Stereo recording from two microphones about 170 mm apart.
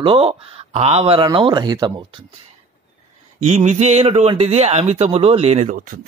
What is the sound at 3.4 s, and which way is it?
Speech, 40° right (ahead or behind).